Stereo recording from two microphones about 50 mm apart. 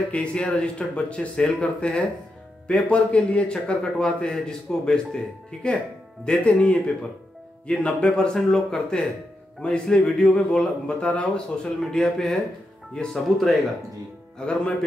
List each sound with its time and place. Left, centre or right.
0.1 s speech: left
11.8 s speech: centre
14.4 s speech: centre